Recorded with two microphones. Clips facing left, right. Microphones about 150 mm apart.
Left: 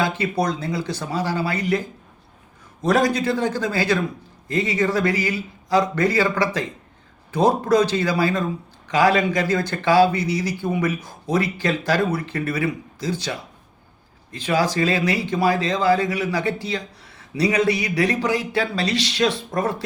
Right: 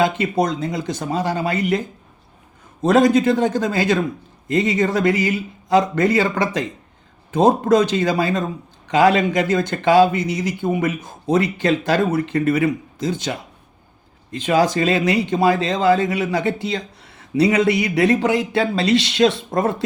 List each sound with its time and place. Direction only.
0.0 s speech: 20° right (ahead or behind)
2.8 s speech: 20° right (ahead or behind)
14.3 s speech: 20° right (ahead or behind)